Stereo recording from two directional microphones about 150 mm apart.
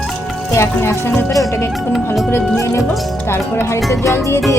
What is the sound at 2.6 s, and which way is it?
Music, 20° left (ahead or behind).